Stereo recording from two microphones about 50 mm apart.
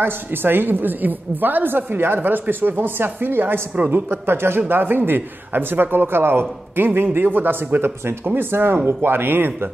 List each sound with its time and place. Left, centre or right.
0.0 s a man's voice: right